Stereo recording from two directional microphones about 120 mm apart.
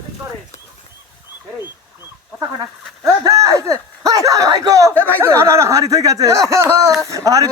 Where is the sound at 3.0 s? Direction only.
25° right (ahead or behind).